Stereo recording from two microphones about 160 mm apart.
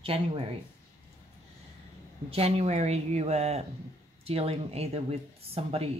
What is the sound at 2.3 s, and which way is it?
Speech, 40° right (ahead or behind).